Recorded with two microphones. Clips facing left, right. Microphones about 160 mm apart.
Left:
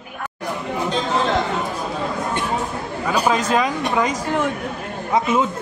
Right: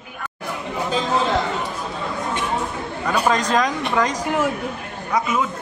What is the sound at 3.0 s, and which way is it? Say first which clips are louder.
Speech: even; centre (ahead or behind).